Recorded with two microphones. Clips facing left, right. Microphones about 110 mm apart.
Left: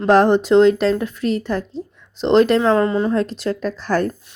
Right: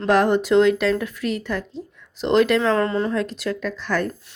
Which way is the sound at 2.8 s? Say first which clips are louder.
Left 4 dB; 20° left (ahead or behind).